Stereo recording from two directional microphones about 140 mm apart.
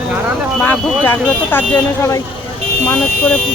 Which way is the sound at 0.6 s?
10° left (ahead or behind).